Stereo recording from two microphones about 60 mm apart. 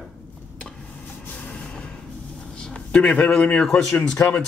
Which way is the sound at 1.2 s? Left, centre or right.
Left.